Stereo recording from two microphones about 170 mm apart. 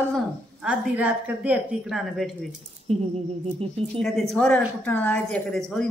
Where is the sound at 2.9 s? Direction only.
35° right (ahead or behind).